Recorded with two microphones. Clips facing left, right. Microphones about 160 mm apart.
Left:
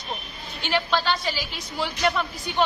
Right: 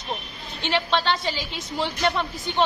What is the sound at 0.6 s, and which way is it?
A woman's voice, 30° right (ahead or behind).